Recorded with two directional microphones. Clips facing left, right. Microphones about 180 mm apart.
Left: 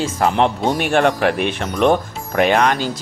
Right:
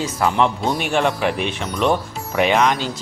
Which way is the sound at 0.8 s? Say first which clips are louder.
Left 5 dB; 55° left (ahead or behind).